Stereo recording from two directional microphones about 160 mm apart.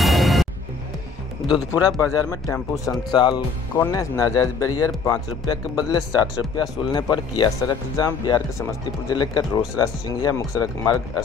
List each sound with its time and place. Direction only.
0.0 s music: centre (ahead or behind)
1.5 s speech: 20° left (ahead or behind)